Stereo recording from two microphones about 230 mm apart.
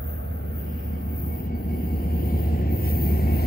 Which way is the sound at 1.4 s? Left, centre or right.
Left.